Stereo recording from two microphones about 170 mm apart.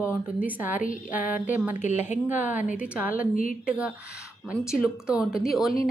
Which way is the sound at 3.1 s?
55° left (ahead or behind).